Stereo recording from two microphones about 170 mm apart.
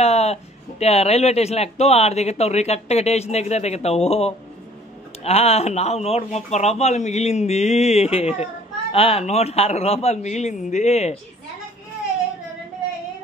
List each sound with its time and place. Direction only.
0.0 s a man's voice: 40° left (ahead or behind)